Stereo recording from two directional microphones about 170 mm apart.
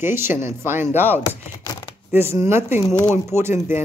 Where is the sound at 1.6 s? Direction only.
20° left (ahead or behind).